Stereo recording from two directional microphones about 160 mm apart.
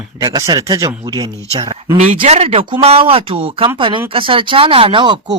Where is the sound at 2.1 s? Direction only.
40° right (ahead or behind).